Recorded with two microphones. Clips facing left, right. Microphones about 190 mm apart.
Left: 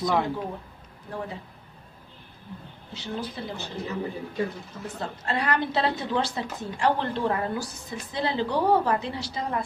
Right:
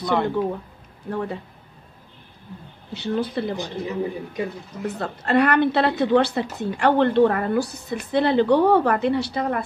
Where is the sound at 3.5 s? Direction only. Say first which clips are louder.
Right 5 dB; 15° right (ahead or behind).